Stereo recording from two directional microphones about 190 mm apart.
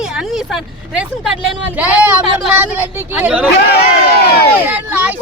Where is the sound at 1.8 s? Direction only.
10° right (ahead or behind).